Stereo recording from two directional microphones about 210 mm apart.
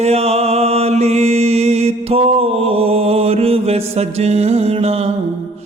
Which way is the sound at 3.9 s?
30° right (ahead or behind).